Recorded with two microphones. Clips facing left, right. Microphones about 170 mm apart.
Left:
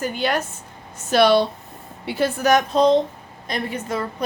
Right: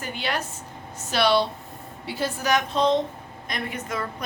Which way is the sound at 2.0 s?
60° left (ahead or behind).